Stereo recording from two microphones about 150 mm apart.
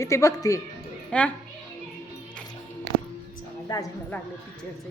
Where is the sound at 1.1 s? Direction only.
10° left (ahead or behind).